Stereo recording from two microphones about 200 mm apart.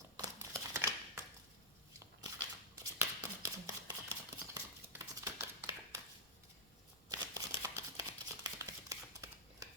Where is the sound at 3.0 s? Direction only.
15° right (ahead or behind).